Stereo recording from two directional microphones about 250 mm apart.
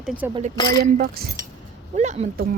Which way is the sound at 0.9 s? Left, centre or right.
Right.